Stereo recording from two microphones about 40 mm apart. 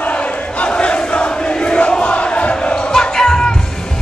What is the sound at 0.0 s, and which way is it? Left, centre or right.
Crowd, left.